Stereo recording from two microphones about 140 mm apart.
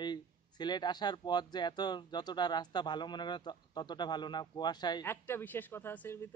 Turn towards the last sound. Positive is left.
turn(degrees=15)  # may be behind; listen again after turning